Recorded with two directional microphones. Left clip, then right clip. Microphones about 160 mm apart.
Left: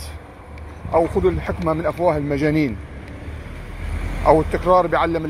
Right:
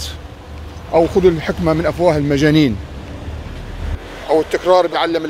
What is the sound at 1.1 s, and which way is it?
Speech, 30° right (ahead or behind).